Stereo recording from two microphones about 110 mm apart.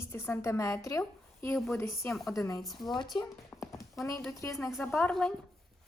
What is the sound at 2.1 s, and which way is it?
Speech, centre (ahead or behind).